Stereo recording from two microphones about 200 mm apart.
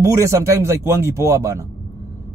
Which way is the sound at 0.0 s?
15° right (ahead or behind).